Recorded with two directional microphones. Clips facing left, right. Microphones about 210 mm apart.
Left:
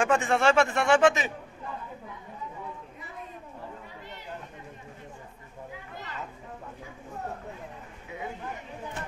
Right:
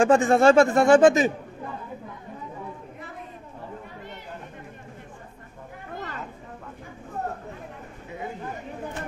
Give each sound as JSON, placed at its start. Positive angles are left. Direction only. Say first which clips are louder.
{"t": 0.0, "sound": "speech", "louder": "right 7 dB", "side_deg": -35}